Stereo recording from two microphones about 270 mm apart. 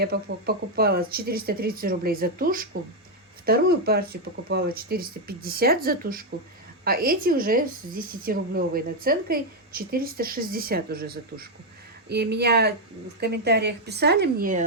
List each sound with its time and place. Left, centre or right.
0.0 s a woman's voice: right